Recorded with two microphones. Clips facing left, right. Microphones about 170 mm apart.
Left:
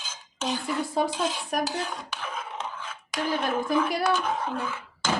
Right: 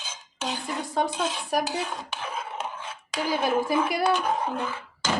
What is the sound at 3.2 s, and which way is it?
Speech, 10° right (ahead or behind).